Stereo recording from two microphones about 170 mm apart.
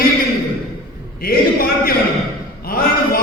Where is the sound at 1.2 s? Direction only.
60° left (ahead or behind).